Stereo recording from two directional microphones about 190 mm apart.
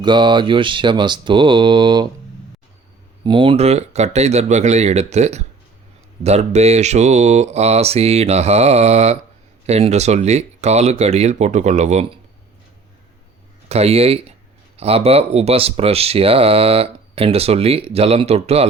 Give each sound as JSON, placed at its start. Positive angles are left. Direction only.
{"t": 0.0, "sound": "speech", "side_deg": -25}
{"t": 3.2, "sound": "speech", "side_deg": -25}
{"t": 13.7, "sound": "speech", "side_deg": -35}